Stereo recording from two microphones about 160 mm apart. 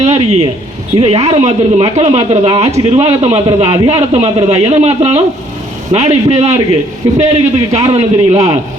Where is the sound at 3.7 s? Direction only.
25° right (ahead or behind).